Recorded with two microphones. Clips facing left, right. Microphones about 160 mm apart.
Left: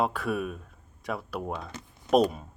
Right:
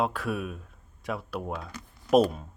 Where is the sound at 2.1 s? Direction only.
Centre (ahead or behind).